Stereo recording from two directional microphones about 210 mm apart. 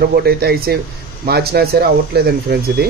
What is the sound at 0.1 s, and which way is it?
Speech, 50° right (ahead or behind).